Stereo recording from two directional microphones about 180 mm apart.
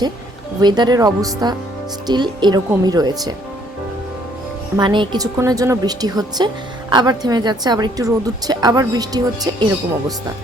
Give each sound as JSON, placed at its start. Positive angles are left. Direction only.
{"t": 0.6, "sound": "a woman's voice", "side_deg": -25}
{"t": 4.8, "sound": "a woman's voice", "side_deg": -25}